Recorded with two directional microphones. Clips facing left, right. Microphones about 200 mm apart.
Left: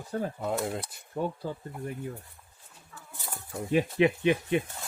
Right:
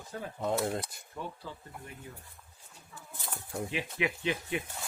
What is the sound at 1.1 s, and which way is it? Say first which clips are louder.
Speech: left 10 dB; 45° left (ahead or behind).